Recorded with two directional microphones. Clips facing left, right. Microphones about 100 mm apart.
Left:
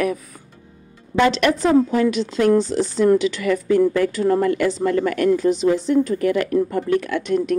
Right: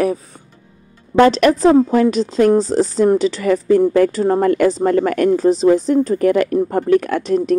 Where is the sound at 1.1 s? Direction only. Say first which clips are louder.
Right 6 dB; 45° right (ahead or behind).